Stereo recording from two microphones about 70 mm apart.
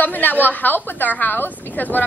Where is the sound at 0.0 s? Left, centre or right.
Left.